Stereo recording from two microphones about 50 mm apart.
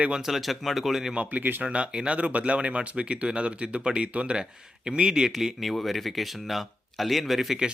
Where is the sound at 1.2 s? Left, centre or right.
Right.